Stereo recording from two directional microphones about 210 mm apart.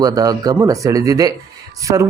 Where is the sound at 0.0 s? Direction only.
15° right (ahead or behind).